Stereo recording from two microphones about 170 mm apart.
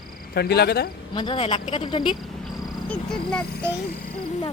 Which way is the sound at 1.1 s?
30° left (ahead or behind).